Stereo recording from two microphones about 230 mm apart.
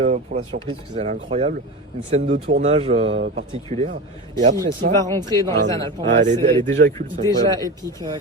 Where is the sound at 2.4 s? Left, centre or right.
Right.